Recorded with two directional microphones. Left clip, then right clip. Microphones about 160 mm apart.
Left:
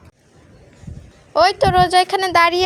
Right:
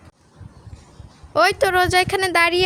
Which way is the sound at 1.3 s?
20° right (ahead or behind).